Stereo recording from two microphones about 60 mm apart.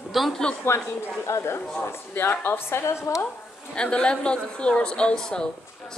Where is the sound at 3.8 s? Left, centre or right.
Centre.